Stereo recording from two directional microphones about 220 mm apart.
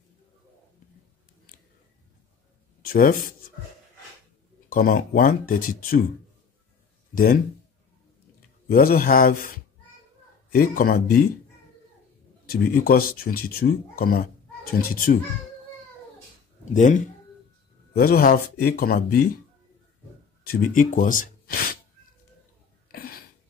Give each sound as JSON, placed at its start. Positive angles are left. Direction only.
{"t": 2.8, "sound": "speech", "side_deg": 40}
{"t": 4.6, "sound": "speech", "side_deg": 40}
{"t": 8.6, "sound": "speech", "side_deg": 40}
{"t": 10.5, "sound": "speech", "side_deg": 40}
{"t": 12.4, "sound": "speech", "side_deg": 40}
{"t": 16.7, "sound": "speech", "side_deg": 35}
{"t": 20.4, "sound": "speech", "side_deg": 40}
{"t": 22.8, "sound": "a sound", "side_deg": 45}